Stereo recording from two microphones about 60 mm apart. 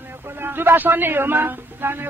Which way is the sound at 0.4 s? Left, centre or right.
Right.